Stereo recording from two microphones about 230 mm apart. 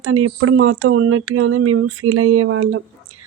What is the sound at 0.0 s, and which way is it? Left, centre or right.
A woman's voice, right.